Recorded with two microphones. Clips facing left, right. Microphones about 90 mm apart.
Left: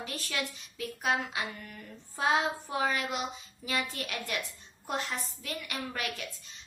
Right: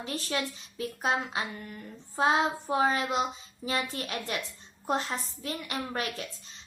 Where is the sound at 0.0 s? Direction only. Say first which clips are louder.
Right 4 dB; 30° right (ahead or behind).